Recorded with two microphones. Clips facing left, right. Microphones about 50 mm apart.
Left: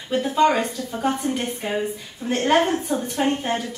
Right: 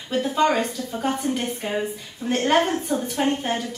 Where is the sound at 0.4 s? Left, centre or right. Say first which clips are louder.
Left 3 dB; centre.